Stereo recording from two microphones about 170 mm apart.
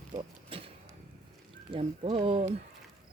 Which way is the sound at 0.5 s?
30° right (ahead or behind).